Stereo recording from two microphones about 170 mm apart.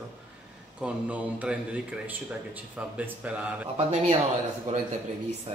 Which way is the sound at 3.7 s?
35° right (ahead or behind).